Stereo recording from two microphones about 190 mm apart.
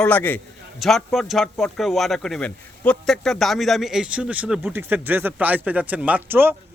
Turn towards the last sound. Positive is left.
turn(degrees=-10)  # may be behind; listen again after turning